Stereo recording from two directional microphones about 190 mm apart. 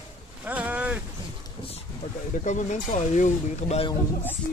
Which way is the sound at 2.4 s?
40° left (ahead or behind).